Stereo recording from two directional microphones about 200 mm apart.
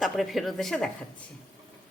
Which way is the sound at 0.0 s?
Centre (ahead or behind).